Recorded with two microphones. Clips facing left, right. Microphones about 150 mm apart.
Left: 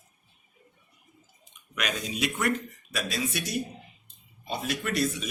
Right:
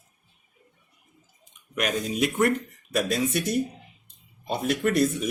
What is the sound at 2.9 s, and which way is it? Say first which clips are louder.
Speech: right 7 dB; 60° right (ahead or behind).